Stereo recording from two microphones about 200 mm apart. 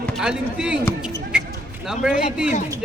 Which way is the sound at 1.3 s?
5° right (ahead or behind).